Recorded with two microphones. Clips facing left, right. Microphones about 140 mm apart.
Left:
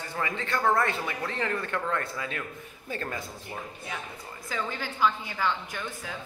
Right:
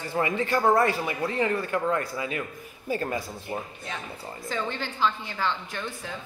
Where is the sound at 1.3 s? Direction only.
10° right (ahead or behind).